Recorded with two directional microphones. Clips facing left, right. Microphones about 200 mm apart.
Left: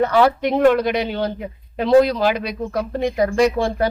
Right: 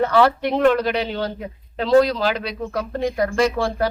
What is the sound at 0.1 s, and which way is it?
Speech, 15° left (ahead or behind).